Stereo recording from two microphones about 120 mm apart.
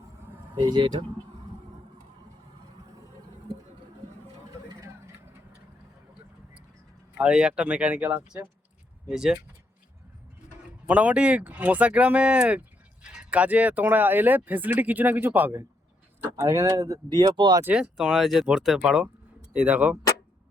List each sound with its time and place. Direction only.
0.5 s speech: 40° right (ahead or behind)
4.7 s vehicle: 25° right (ahead or behind)
7.2 s speech: 5° right (ahead or behind)
10.8 s speech: 10° right (ahead or behind)
16.3 s speech: 25° right (ahead or behind)
17.6 s speech: 15° right (ahead or behind)
17.9 s speech: 5° right (ahead or behind)